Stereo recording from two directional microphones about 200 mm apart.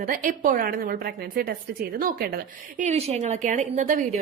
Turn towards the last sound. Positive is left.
turn(degrees=-40)  # may be behind; listen again after turning